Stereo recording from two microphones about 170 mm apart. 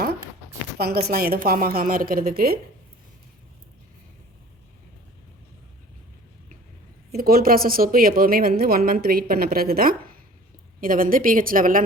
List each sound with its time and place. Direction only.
0.8 s speech: 65° right (ahead or behind)
7.1 s speech: 60° right (ahead or behind)